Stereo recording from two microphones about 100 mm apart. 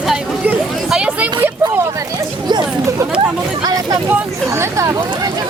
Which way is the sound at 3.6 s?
40° right (ahead or behind).